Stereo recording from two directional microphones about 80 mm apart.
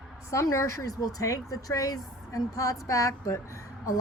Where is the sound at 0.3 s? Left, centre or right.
Left.